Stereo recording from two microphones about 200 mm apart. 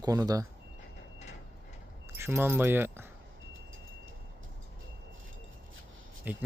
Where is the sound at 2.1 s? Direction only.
10° right (ahead or behind).